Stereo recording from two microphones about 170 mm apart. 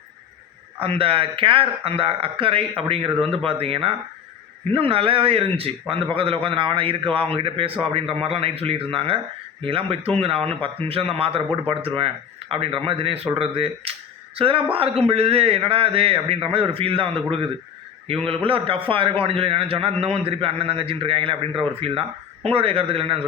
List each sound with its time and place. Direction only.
0.8 s a man's voice: 35° right (ahead or behind)
18.4 s a man's voice: 30° right (ahead or behind)